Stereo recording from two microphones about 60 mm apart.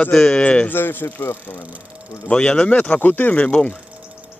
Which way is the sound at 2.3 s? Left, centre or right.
Centre.